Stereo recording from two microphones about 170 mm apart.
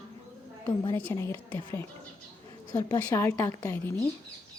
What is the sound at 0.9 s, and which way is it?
Speech, 15° left (ahead or behind).